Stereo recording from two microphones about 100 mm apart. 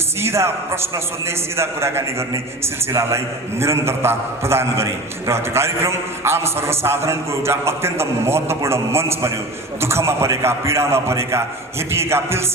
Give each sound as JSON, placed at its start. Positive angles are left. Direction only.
{"t": 0.2, "sound": "a man's voice", "side_deg": -25}